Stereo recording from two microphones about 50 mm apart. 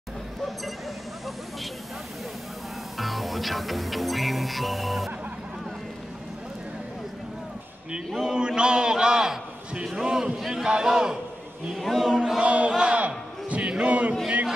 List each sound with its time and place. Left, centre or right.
3.0 s music: centre
8.3 s chant: centre
9.8 s a man's voice: centre
11.7 s a man's voice: centre
12.4 s battle cry: right